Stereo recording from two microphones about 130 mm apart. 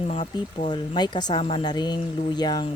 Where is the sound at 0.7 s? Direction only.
35° left (ahead or behind).